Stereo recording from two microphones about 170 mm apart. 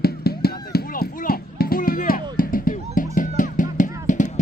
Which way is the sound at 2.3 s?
55° left (ahead or behind).